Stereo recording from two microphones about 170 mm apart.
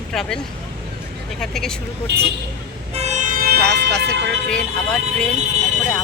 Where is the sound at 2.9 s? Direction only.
40° right (ahead or behind); by 3.6 s 60° right (ahead or behind).